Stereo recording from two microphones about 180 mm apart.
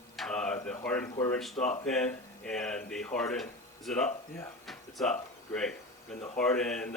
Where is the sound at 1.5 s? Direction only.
40° left (ahead or behind).